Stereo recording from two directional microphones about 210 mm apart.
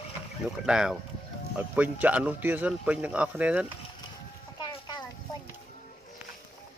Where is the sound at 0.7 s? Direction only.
5° right (ahead or behind).